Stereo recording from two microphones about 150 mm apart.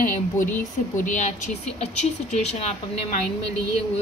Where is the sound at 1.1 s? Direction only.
55° left (ahead or behind).